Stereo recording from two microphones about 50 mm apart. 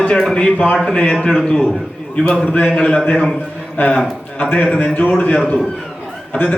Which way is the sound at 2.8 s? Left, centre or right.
Left.